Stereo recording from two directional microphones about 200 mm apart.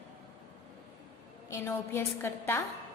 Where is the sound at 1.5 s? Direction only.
15° left (ahead or behind).